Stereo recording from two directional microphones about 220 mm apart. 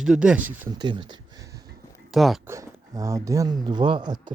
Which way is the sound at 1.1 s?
15° right (ahead or behind).